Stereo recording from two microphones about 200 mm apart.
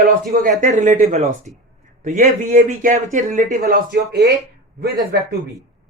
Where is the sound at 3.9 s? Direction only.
55° right (ahead or behind).